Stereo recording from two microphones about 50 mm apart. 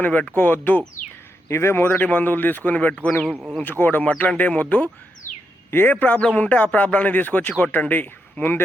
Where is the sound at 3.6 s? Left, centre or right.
Left.